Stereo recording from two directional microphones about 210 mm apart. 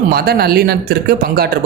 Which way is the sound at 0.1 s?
45° right (ahead or behind).